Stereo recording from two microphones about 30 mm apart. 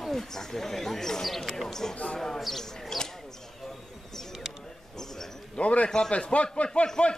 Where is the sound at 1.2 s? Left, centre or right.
Centre.